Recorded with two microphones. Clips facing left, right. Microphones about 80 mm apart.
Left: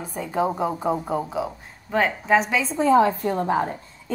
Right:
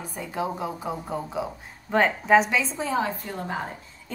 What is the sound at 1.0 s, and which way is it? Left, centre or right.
Speech, centre.